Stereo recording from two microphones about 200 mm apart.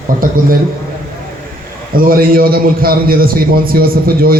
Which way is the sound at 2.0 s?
45° right (ahead or behind).